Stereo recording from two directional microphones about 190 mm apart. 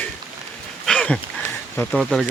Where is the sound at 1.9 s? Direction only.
Centre (ahead or behind).